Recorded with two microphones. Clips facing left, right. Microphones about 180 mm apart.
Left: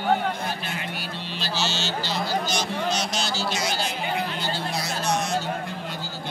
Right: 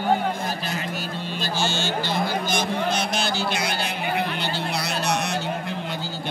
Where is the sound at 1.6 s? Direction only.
50° right (ahead or behind).